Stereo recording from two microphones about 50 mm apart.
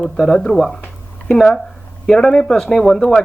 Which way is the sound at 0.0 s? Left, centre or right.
Centre.